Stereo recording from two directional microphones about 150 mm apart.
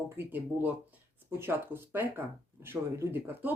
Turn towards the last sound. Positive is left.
turn(degrees=-15)  # may be behind; listen again after turning